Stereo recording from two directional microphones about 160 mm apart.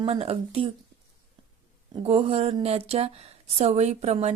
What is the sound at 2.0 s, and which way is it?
Speech, 40° right (ahead or behind).